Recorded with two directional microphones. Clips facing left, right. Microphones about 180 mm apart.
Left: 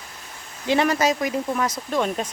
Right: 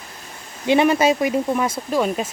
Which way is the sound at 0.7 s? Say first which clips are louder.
Right 4 dB; 20° right (ahead or behind).